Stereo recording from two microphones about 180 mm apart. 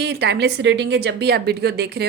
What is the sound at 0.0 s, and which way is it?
A woman's voice, 65° right (ahead or behind).